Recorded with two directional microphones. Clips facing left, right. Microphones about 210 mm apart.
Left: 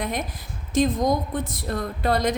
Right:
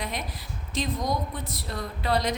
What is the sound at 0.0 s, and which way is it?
A woman's voice, 50° left (ahead or behind).